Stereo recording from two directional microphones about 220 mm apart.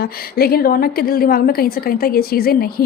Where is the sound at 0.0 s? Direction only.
45° left (ahead or behind).